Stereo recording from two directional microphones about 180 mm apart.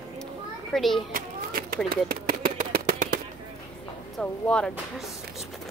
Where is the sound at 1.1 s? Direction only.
55° right (ahead or behind).